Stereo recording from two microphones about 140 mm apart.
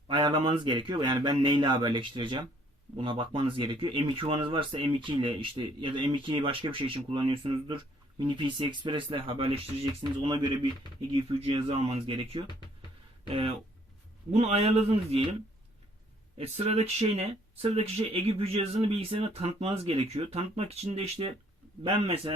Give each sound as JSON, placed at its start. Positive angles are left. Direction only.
{"t": 0.1, "sound": "speech", "side_deg": -35}
{"t": 11.1, "sound": "speech", "side_deg": -45}
{"t": 16.4, "sound": "speech", "side_deg": -50}